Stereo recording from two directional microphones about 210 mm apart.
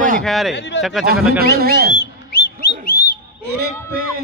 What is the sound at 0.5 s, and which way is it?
Speech, 55° left (ahead or behind).